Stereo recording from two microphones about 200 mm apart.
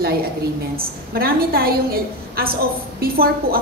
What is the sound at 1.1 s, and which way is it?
A woman's voice, 50° right (ahead or behind).